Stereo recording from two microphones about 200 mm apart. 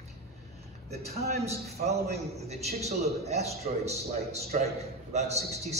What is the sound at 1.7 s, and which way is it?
A man's voice, 35° right (ahead or behind).